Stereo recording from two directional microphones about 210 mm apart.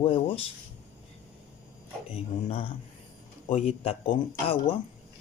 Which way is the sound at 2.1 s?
25° left (ahead or behind).